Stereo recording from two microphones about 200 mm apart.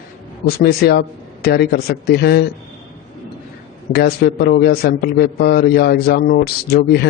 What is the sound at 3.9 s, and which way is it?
A man's voice, 55° left (ahead or behind).